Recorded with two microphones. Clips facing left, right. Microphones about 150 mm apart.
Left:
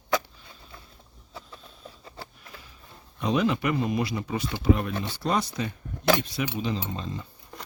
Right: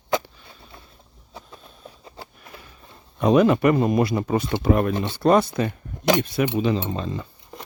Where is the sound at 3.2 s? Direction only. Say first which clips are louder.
Right 8 dB; 50° right (ahead or behind).